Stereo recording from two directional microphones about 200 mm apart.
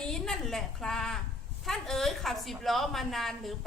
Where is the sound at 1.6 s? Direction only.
Centre (ahead or behind).